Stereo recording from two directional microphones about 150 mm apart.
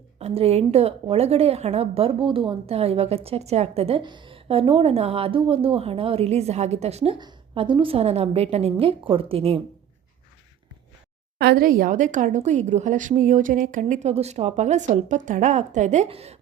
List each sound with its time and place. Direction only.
0.2 s a woman's voice: 45° right (ahead or behind)
11.3 s speech: 85° right; by 16.4 s 40° right (ahead or behind)